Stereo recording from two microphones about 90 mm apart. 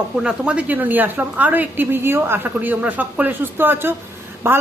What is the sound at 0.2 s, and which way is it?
A man's voice, 10° right (ahead or behind).